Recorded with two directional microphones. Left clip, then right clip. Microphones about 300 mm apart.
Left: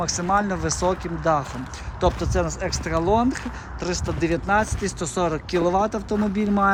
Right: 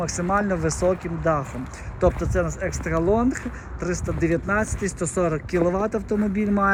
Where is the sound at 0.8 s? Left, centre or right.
Centre.